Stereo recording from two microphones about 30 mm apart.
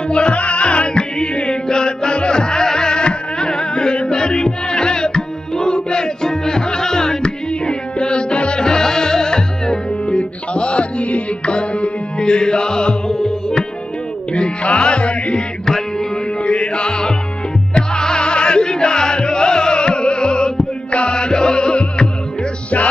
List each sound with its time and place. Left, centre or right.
0.1 s music: left
0.4 s music: left
6.2 s music: left
7.6 s music: left
8.6 s music: left
10.0 s music: left
11.4 s music: left
12.2 s music: left
14.3 s music: left
15.6 s music: centre
16.4 s music: left